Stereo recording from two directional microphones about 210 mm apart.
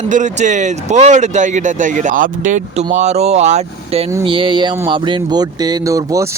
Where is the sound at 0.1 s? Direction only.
35° right (ahead or behind).